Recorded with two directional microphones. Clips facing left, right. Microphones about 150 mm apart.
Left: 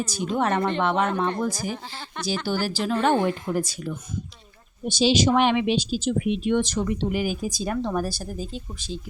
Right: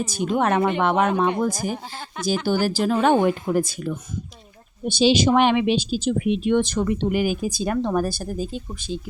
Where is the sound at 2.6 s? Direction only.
50° right (ahead or behind).